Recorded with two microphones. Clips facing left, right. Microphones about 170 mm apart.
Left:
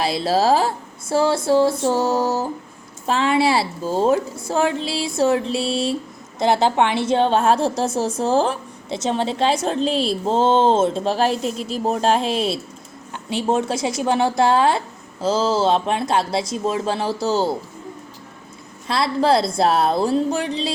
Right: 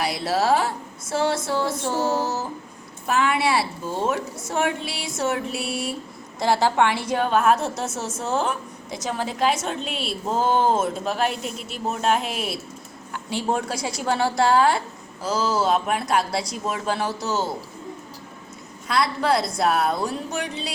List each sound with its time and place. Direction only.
0.0 s a woman's voice: 25° left (ahead or behind)
1.5 s music: 30° left (ahead or behind)
3.1 s a woman's voice: 30° left (ahead or behind)
18.9 s a woman's voice: 30° left (ahead or behind)